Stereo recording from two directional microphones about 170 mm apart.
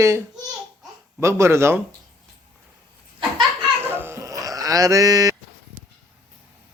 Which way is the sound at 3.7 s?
10° right (ahead or behind).